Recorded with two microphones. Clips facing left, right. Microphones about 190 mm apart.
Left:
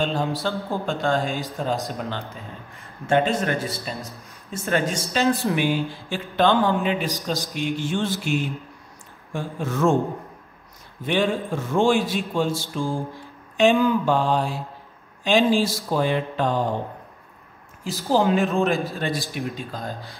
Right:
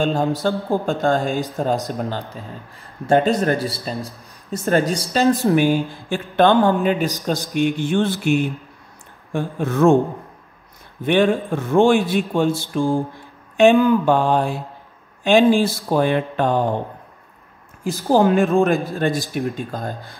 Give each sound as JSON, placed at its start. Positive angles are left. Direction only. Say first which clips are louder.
{"t": 0.0, "sound": "a man's voice", "louder": "right 5 dB", "side_deg": -45}
{"t": 11.1, "sound": "a man's voice", "louder": "right 6 dB", "side_deg": -60}
{"t": 17.8, "sound": "speech", "louder": "right 5 dB", "side_deg": -50}